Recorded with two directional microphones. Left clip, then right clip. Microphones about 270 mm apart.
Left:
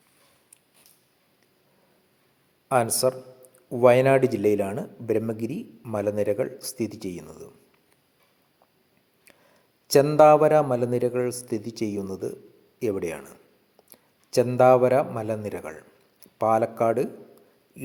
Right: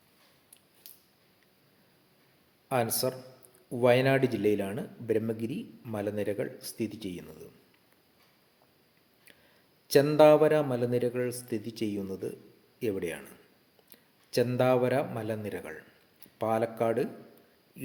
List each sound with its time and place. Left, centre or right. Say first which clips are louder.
2.6 s speech: left 7 dB; centre
9.8 s a man's voice: left 5 dB; centre
17.7 s a sound: left 5 dB; centre